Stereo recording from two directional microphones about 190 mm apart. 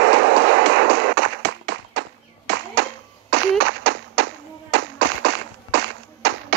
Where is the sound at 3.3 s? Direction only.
70° right (ahead or behind).